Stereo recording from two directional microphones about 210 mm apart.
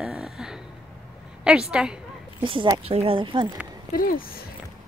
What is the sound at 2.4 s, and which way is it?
Speech, 25° right (ahead or behind).